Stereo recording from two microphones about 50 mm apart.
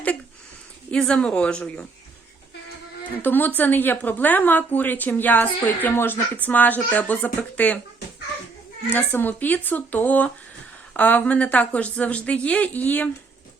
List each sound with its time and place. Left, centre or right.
0.9 s a woman's voice: centre
3.2 s a woman's voice: left
5.9 s speech: left
6.3 s a woman's voice: left
8.9 s a woman's voice: left